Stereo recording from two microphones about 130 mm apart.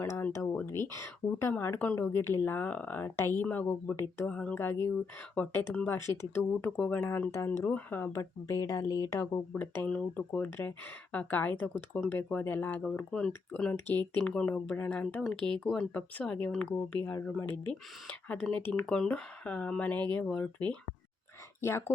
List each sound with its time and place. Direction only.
0.0 s speech: 15° left (ahead or behind)
6.7 s speech: 10° left (ahead or behind); by 9.4 s 25° left (ahead or behind)
9.6 s speech: 10° left (ahead or behind)